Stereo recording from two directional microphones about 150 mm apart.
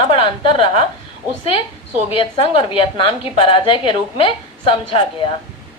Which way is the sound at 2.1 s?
35° left (ahead or behind).